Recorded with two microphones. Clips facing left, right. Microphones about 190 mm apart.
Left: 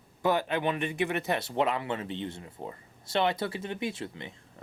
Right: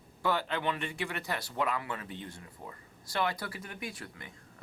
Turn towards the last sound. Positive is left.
turn(degrees=25)  # may be behind; listen again after turning